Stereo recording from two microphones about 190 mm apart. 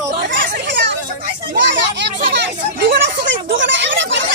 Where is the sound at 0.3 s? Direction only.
70° right (ahead or behind).